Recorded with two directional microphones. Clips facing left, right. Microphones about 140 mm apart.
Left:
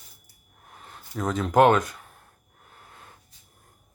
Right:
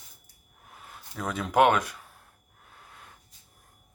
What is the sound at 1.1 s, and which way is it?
Speech, 5° right (ahead or behind).